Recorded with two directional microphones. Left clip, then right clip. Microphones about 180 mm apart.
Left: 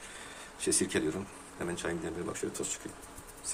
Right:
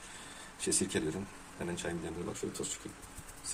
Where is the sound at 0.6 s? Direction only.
Centre (ahead or behind).